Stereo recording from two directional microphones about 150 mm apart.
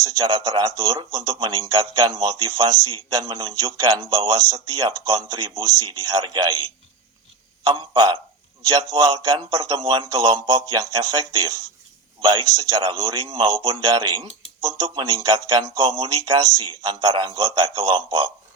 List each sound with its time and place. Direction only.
0.0 s speech: 25° right (ahead or behind)
7.6 s speech: 30° right (ahead or behind)